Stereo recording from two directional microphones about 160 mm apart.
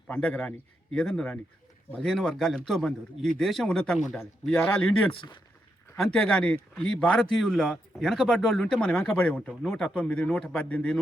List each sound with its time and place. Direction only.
0.1 s speech: 5° left (ahead or behind)
5.1 s speech: 30° left (ahead or behind)
6.0 s speech: 5° left (ahead or behind)